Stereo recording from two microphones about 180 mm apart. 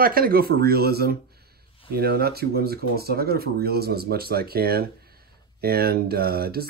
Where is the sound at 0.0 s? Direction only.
55° right (ahead or behind).